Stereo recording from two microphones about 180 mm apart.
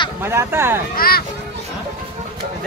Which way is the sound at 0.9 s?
55° left (ahead or behind).